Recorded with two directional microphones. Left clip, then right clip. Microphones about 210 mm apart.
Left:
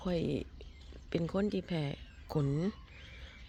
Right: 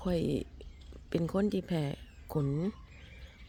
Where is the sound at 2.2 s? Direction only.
5° right (ahead or behind).